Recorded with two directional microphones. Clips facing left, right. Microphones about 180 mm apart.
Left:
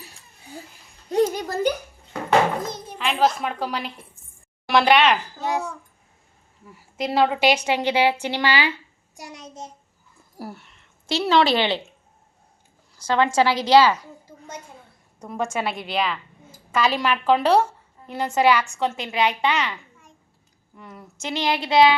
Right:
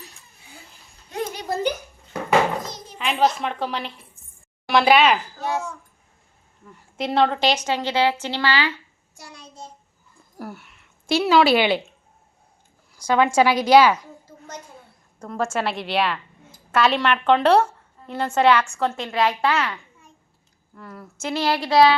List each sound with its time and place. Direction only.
1.1 s a sound: 45° left (ahead or behind)
2.6 s music: 55° left (ahead or behind)
3.0 s a woman's voice: centre (ahead or behind)
5.4 s a child's voice: 15° left (ahead or behind)
6.7 s a woman's voice: 5° left (ahead or behind); by 9.6 s 20° left (ahead or behind)
10.3 s a sound: centre (ahead or behind)
11.2 s a woman's voice: 5° right (ahead or behind)
13.0 s a woman's voice: 10° right (ahead or behind)
15.3 s a woman's voice: centre (ahead or behind)
21.6 s child singing: 20° left (ahead or behind)